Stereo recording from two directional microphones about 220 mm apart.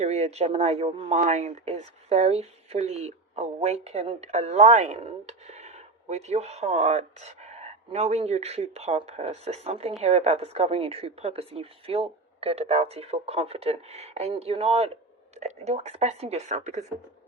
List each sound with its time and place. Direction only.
0.0 s a woman's voice: 30° right (ahead or behind)